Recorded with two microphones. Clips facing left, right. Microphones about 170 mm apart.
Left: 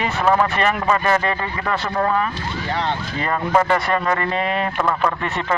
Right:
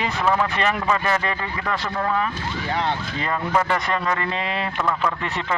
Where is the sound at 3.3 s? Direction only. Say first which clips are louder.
Left 4 dB; 50° left (ahead or behind).